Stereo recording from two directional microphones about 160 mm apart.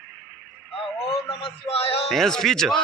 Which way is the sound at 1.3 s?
35° left (ahead or behind).